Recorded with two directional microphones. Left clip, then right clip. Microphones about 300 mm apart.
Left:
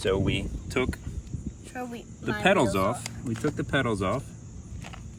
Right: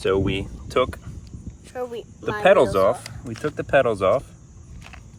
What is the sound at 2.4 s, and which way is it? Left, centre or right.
Speech, right.